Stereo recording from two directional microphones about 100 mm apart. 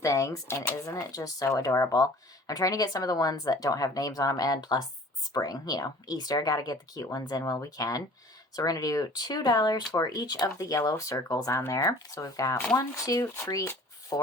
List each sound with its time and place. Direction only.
0.0 s speech: 30° left (ahead or behind)
0.9 s speech: 35° left (ahead or behind)